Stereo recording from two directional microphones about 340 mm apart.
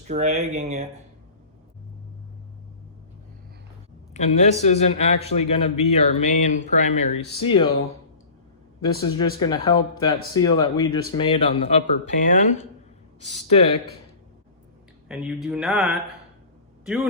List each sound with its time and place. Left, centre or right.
0.1 s speech: centre
4.1 s a man's voice: centre
8.8 s a man's voice: centre
15.0 s speech: centre